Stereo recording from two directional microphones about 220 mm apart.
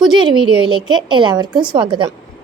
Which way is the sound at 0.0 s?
20° right (ahead or behind).